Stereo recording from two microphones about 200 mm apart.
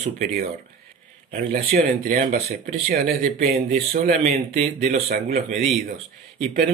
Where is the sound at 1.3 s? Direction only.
45° right (ahead or behind).